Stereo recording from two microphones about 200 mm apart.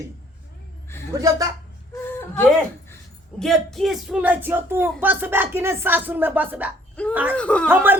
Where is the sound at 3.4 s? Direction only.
Centre (ahead or behind).